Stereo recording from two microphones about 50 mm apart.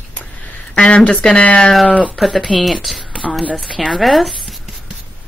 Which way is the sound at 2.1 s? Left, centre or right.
Centre.